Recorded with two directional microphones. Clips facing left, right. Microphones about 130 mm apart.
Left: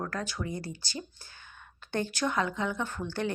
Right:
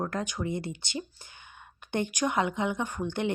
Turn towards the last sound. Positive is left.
turn(degrees=-20)  # may be behind; listen again after turning